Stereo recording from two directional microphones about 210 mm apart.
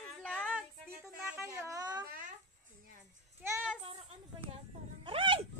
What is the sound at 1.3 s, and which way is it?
Speech, 15° right (ahead or behind).